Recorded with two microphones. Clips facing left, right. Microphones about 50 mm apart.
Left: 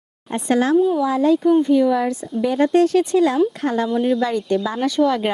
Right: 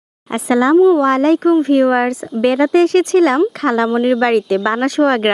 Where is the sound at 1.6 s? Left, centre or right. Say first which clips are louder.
Right 4 dB; right.